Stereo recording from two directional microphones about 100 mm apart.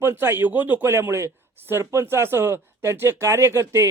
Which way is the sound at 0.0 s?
25° right (ahead or behind).